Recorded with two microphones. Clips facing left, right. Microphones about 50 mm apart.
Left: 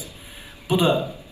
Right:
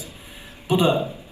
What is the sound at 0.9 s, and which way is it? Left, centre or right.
Speech, right.